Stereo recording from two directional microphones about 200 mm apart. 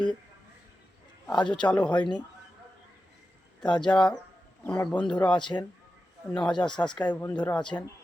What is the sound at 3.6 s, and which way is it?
Speech, 20° left (ahead or behind).